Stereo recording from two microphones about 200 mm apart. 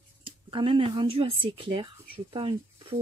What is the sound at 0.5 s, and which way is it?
Speech, 25° right (ahead or behind).